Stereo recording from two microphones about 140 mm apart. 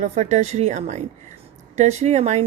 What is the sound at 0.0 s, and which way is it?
A woman's voice, 55° right (ahead or behind).